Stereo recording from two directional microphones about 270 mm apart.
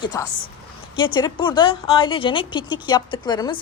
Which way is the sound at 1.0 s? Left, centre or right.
Centre.